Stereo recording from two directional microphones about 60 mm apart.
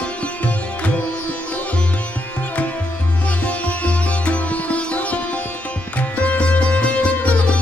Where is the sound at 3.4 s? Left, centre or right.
Left.